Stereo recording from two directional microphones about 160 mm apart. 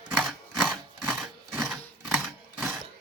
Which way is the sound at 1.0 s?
10° right (ahead or behind).